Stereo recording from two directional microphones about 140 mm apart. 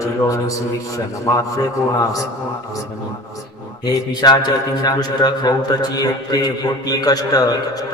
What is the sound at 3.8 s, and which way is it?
A man's voice, 30° left (ahead or behind).